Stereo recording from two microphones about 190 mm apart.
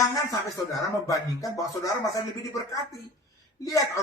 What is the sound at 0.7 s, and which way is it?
Speech, 15° left (ahead or behind).